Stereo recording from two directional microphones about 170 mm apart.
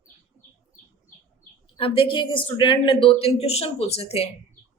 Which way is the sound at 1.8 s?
30° left (ahead or behind).